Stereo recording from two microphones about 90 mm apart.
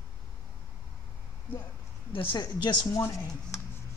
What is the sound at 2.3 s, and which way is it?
Speech, 50° left (ahead or behind).